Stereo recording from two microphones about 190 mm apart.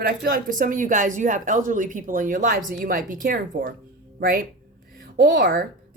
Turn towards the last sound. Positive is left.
turn(degrees=-55)  # may be behind; listen again after turning